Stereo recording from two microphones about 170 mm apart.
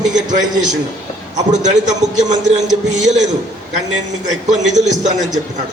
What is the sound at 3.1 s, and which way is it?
Speech, 45° right (ahead or behind).